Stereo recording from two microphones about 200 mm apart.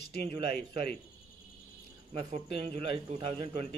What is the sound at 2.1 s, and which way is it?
A man's voice, 30° right (ahead or behind).